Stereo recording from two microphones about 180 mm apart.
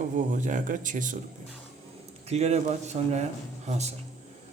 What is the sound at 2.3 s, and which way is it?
A man's voice, 40° right (ahead or behind).